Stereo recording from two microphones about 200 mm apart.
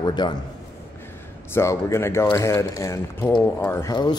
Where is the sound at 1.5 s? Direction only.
15° left (ahead or behind).